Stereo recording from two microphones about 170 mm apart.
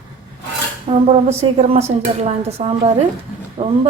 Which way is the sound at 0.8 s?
35° right (ahead or behind).